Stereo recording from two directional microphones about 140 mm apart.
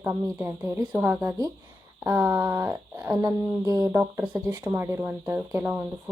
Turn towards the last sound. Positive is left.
turn(degrees=-15)  # may be behind; listen again after turning